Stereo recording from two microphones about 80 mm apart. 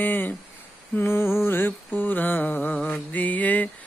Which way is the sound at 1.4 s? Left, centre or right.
Left.